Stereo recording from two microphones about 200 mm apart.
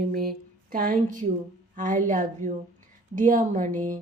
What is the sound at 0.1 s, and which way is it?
A woman's voice, 50° right (ahead or behind).